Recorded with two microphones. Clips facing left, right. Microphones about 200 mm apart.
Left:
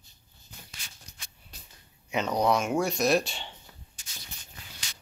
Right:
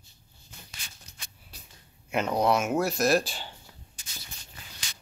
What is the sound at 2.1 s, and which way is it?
Speech, 5° right (ahead or behind).